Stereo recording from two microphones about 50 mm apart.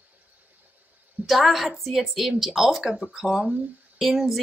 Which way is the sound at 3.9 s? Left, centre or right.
Centre.